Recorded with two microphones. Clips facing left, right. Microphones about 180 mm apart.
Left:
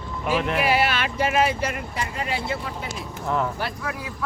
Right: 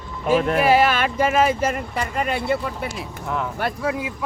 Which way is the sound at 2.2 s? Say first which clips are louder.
Right 6 dB; 60° right (ahead or behind).